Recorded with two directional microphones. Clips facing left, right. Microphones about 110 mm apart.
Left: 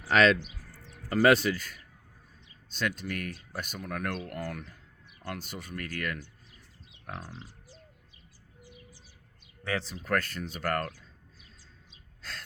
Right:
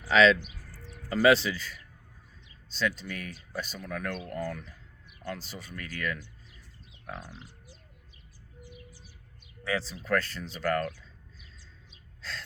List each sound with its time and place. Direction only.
0.1 s speech: 50° left (ahead or behind)
7.2 s speech: 35° left (ahead or behind)
9.6 s speech: 40° left (ahead or behind)